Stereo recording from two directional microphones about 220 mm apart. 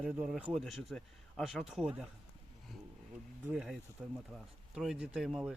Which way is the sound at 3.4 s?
Centre (ahead or behind).